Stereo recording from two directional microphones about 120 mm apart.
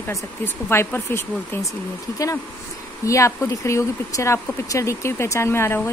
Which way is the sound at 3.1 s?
25° left (ahead or behind).